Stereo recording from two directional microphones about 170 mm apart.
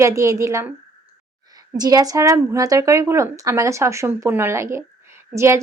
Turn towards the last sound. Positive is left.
turn(degrees=-15)  # may be behind; listen again after turning